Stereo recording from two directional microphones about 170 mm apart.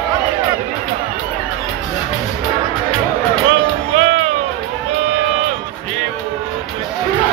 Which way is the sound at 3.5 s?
40° right (ahead or behind).